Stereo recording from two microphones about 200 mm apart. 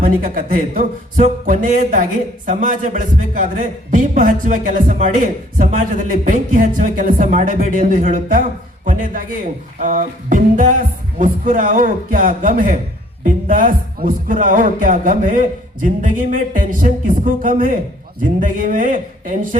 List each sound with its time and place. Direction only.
0.0 s a man's voice: 45° right (ahead or behind)